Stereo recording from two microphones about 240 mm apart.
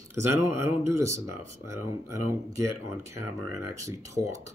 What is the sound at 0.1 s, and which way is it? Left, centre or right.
Speech, centre.